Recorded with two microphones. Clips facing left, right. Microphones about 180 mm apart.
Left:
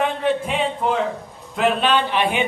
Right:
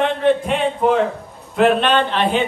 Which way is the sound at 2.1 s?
10° left (ahead or behind).